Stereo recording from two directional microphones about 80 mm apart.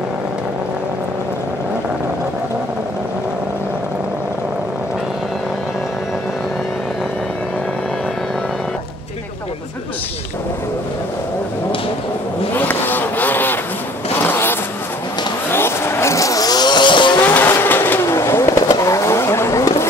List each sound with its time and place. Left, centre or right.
12.5 s vehicle: left
17.5 s vehicle: left